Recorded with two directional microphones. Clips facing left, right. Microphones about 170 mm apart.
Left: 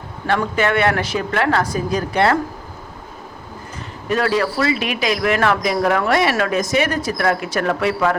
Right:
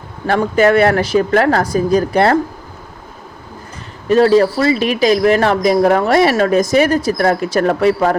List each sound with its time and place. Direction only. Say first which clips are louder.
0.3 s speech: right 6 dB; 40° right (ahead or behind)
4.1 s speech: right 8 dB; 30° right (ahead or behind)